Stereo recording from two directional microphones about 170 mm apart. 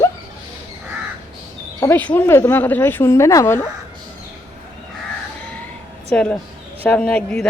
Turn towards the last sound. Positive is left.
turn(degrees=5)  # may be behind; listen again after turning